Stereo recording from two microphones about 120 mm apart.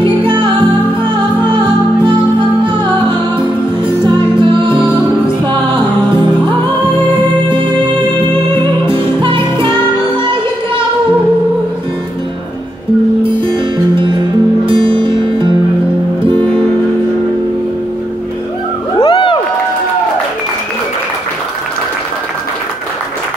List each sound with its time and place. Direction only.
0.0 s music: 45° right (ahead or behind)
4.4 s music: 45° right (ahead or behind)
7.4 s music: 45° right (ahead or behind)
8.8 s music: 45° right (ahead or behind)
14.7 s music: 40° right (ahead or behind)
19.0 s a sound: 45° left (ahead or behind)